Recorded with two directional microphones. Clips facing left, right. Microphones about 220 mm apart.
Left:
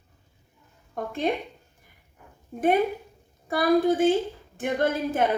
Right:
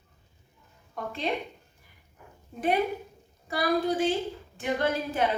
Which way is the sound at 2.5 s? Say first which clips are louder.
Left 4 dB; 45° left (ahead or behind).